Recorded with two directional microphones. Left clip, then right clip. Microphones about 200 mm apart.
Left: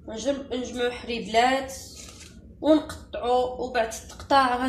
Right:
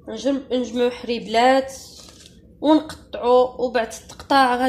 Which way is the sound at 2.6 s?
50° right (ahead or behind).